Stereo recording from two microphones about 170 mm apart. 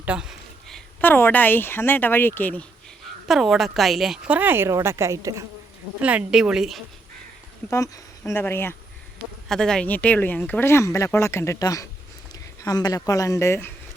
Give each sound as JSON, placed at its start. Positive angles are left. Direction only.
{"t": 0.0, "sound": "a sound", "side_deg": -5}
{"t": 1.0, "sound": "speech", "side_deg": 10}
{"t": 3.2, "sound": "a woman's voice", "side_deg": 0}
{"t": 6.0, "sound": "speech", "side_deg": -5}
{"t": 7.7, "sound": "speech", "side_deg": 15}